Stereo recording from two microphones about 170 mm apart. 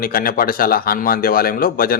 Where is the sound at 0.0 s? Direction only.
60° left (ahead or behind).